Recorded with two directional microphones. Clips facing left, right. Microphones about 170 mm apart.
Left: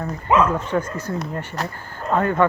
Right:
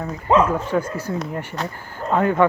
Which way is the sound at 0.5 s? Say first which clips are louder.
Right 1 dB; 10° right (ahead or behind).